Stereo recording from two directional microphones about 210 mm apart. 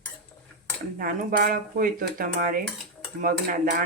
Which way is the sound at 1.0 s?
45° right (ahead or behind).